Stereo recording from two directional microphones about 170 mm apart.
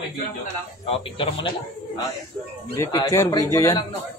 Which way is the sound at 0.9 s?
30° left (ahead or behind).